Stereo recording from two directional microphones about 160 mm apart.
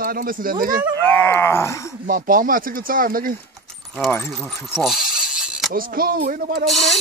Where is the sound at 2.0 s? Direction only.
60° right (ahead or behind).